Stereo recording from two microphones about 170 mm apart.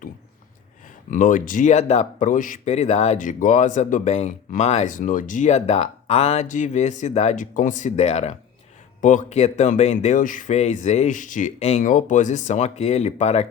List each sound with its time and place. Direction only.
1.1 s speech: 50° left (ahead or behind)